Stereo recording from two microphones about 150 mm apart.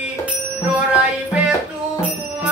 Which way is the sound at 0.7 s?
5° right (ahead or behind).